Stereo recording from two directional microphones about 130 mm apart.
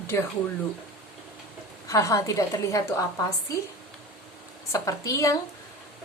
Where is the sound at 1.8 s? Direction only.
25° left (ahead or behind).